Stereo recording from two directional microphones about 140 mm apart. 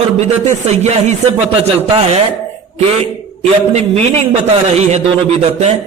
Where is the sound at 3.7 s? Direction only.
45° right (ahead or behind).